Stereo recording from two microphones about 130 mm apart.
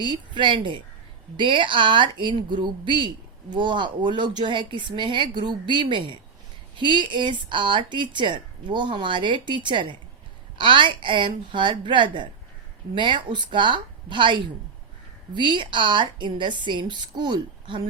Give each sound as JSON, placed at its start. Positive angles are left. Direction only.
{"t": 0.0, "sound": "a woman's voice", "side_deg": -40}